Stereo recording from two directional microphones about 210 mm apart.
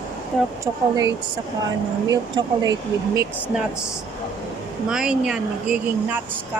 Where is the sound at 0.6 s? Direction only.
15° right (ahead or behind).